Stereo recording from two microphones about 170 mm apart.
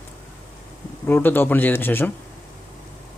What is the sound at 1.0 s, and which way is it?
Speech, 10° left (ahead or behind).